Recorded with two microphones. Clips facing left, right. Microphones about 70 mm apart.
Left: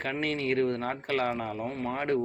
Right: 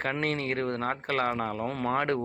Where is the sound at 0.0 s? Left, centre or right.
Right.